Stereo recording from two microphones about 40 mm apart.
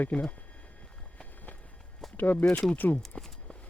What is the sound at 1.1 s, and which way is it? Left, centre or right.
Run, left.